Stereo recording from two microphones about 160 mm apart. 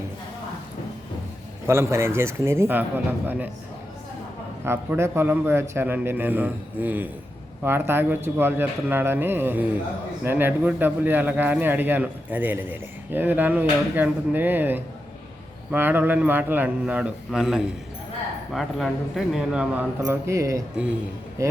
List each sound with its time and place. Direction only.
1.6 s speech: 15° right (ahead or behind)
4.6 s speech: 15° right (ahead or behind)
20.1 s a man's voice: 20° right (ahead or behind)